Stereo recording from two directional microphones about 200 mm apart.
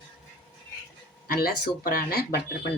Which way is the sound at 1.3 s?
50° left (ahead or behind).